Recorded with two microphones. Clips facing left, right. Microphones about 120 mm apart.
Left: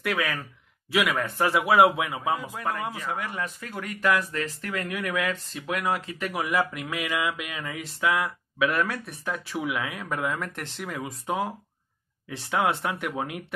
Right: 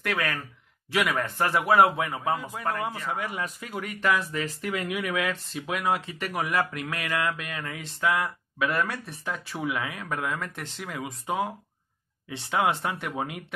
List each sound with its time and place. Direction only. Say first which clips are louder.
0.0 s speech: left 1 dB; 5° left (ahead or behind)